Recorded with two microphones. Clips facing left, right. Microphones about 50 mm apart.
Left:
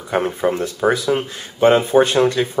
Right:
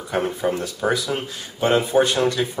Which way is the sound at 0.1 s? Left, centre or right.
Left.